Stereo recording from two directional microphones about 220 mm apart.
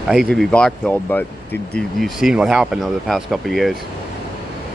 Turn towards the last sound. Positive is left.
turn(degrees=0)  # may be behind; listen again after turning